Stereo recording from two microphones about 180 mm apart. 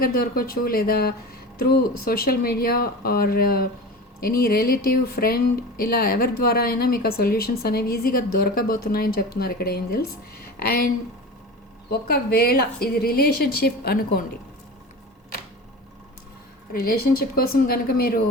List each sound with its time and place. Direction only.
0.0 s speech: 55° left (ahead or behind)
16.7 s speech: 60° left (ahead or behind)